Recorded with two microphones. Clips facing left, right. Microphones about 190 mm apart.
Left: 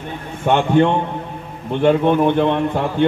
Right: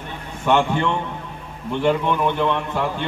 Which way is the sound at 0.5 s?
55° left (ahead or behind).